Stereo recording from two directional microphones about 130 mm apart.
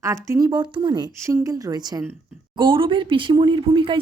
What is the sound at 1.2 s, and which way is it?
Speech, 25° right (ahead or behind).